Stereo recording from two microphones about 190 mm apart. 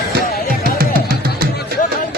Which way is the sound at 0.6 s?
50° right (ahead or behind).